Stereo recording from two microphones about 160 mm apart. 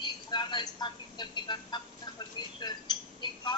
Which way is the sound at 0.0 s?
30° left (ahead or behind).